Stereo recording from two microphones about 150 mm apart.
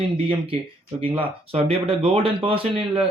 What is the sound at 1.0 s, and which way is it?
Speech, 35° right (ahead or behind).